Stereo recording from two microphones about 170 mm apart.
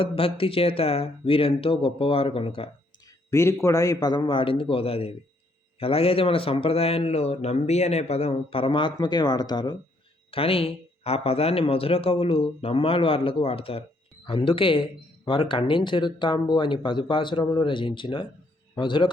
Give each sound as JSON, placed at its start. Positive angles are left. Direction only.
{"t": 0.0, "sound": "speech", "side_deg": 35}
{"t": 3.2, "sound": "speech", "side_deg": 15}